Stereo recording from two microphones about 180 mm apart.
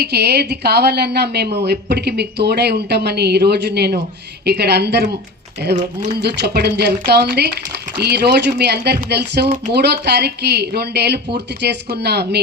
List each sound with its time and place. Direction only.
0.0 s speech: 65° right (ahead or behind)
6.2 s speech: 65° right (ahead or behind)